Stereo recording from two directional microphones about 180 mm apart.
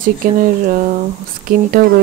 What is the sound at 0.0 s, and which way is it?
A woman's voice, 50° right (ahead or behind).